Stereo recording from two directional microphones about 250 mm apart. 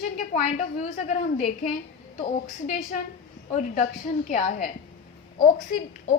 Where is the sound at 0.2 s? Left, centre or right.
Left.